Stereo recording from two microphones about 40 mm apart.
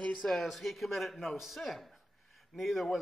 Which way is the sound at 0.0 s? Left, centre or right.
Left.